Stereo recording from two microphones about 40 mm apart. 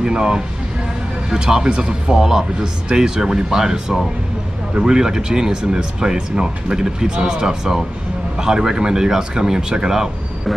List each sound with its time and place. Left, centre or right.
0.0 s speech: right